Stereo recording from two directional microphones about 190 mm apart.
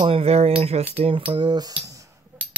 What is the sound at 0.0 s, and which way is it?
Speech, 30° right (ahead or behind).